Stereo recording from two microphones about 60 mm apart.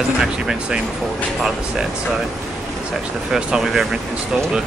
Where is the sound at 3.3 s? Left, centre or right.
Centre.